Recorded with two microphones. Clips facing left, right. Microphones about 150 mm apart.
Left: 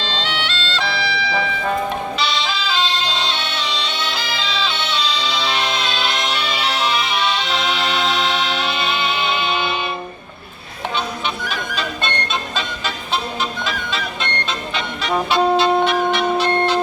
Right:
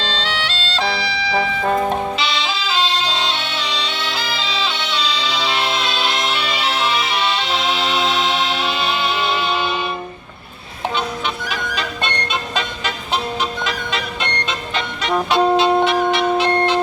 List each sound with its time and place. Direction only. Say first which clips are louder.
0.3 s music: even; 35° right (ahead or behind)
3.8 s music: even; 5° right (ahead or behind)
15.1 s music: right 1 dB; centre (ahead or behind)
15.8 s music: right 1 dB; 20° right (ahead or behind)